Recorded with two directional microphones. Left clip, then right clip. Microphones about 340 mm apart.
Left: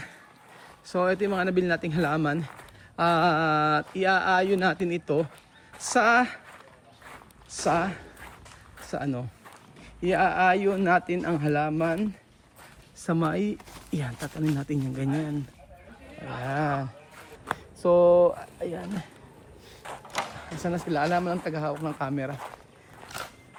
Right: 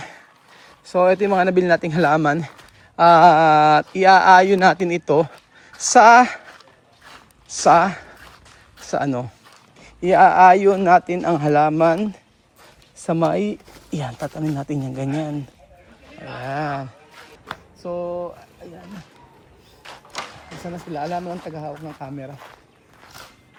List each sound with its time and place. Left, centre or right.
0.9 s speech: centre
7.6 s speech: centre
13.1 s speech: centre
16.5 s speech: centre
17.8 s speech: left
19.9 s a sound: centre
20.7 s speech: centre